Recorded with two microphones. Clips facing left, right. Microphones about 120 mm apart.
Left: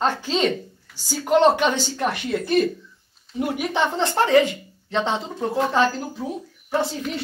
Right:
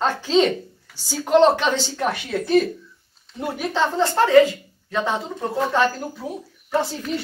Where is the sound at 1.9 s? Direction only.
Centre (ahead or behind).